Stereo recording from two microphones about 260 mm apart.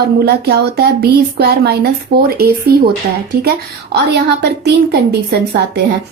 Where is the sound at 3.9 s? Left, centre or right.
Right.